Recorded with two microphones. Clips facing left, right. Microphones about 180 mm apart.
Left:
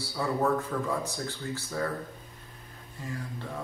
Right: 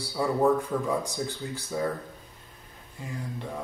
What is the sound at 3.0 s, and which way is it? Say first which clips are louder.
Speech: right 1 dB; 15° right (ahead or behind).